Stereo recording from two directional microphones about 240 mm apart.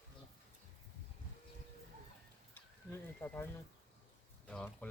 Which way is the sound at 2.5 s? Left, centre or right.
Centre.